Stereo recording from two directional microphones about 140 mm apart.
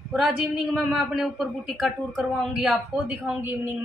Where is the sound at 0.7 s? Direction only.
Centre (ahead or behind).